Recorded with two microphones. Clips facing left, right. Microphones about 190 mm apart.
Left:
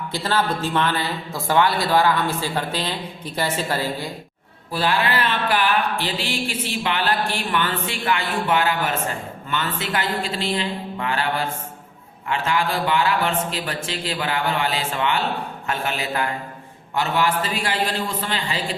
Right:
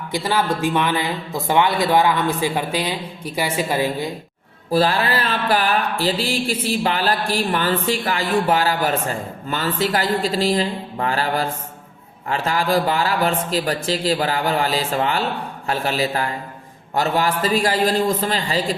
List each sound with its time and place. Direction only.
0.1 s speech: 15° right (ahead or behind)
4.7 s speech: 40° right (ahead or behind)